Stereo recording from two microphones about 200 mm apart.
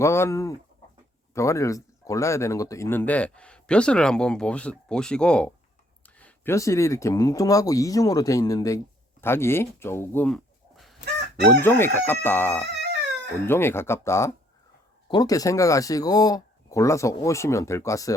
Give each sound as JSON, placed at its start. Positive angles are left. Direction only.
{"t": 0.0, "sound": "speech", "side_deg": 15}